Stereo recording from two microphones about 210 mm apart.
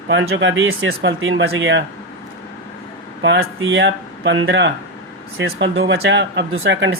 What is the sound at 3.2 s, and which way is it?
Speech, 65° right (ahead or behind).